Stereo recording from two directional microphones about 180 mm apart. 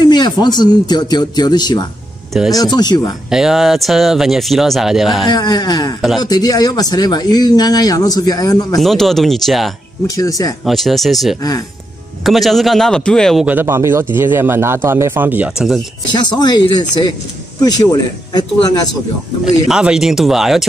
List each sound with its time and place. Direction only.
0.0 s speech: 25° left (ahead or behind)
3.3 s speech: 5° right (ahead or behind)
5.3 s speech: 20° left (ahead or behind)
8.7 s speech: centre (ahead or behind)
10.0 s speech: 20° left (ahead or behind)
10.6 s a man's voice: centre (ahead or behind)
16.1 s a man's voice: 25° left (ahead or behind)
19.4 s speech: 5° right (ahead or behind)